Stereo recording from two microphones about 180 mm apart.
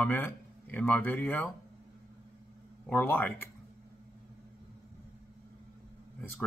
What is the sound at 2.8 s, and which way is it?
Speech, 10° left (ahead or behind).